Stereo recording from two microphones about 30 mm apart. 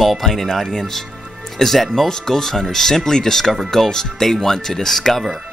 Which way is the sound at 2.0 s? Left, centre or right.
Centre.